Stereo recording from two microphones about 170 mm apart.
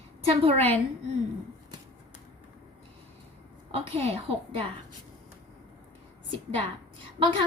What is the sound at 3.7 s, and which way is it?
Speech, 35° right (ahead or behind).